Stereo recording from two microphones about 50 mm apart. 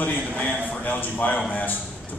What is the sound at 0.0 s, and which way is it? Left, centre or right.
A man's voice, left.